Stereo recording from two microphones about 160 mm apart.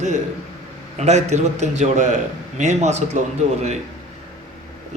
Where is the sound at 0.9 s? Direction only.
45° right (ahead or behind).